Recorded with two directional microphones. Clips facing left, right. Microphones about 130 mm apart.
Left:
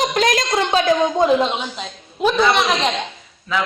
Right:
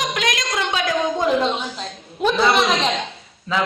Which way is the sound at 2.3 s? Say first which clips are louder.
Even; 5° right (ahead or behind).